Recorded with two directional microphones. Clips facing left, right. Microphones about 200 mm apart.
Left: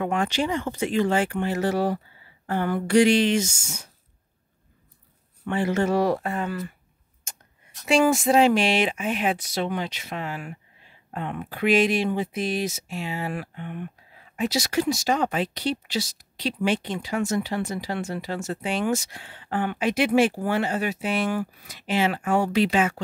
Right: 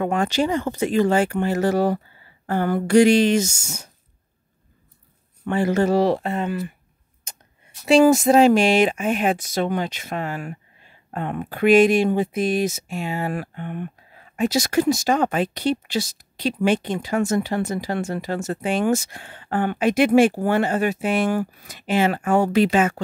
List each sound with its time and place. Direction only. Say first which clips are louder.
0.0 s speech: right 4 dB; 40° right (ahead or behind)
5.4 s speech: right 4 dB; 40° right (ahead or behind); by 6.7 s 20° right (ahead or behind)
7.8 s speech: right 6 dB; 35° right (ahead or behind)